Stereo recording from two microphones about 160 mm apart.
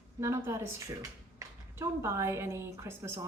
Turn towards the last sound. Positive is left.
turn(degrees=-15)  # may be behind; listen again after turning